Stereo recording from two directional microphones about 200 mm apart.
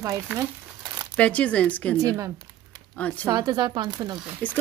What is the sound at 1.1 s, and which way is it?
Speech, 5° left (ahead or behind).